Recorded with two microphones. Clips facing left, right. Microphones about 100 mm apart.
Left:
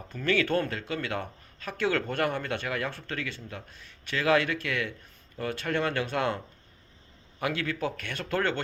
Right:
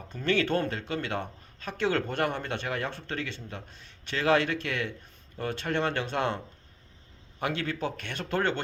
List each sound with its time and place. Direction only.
0.1 s speech: 25° right (ahead or behind)